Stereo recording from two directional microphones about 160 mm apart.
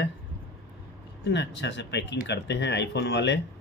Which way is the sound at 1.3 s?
90° left.